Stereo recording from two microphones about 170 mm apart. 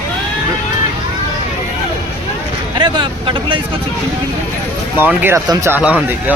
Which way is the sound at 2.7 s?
30° right (ahead or behind).